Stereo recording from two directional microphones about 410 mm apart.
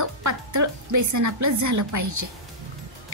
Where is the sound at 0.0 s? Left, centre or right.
Right.